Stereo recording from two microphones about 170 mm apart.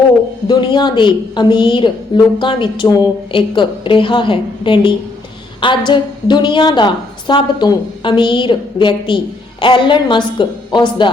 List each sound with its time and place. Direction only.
0.4 s a woman's voice: 25° left (ahead or behind)